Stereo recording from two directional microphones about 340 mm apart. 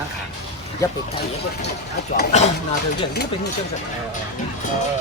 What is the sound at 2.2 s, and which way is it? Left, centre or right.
Speech, centre.